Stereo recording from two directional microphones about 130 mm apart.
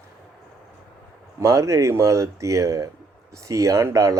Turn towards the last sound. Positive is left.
turn(degrees=-25)  # may be behind; listen again after turning